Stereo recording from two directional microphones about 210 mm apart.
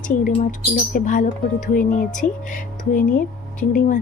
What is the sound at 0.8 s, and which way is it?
Speech, 40° left (ahead or behind).